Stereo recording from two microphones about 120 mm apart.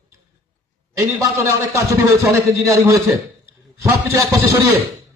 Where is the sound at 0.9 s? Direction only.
25° right (ahead or behind).